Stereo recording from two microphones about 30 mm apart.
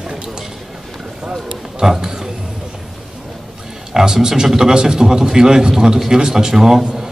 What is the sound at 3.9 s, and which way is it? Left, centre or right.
A man's voice, centre.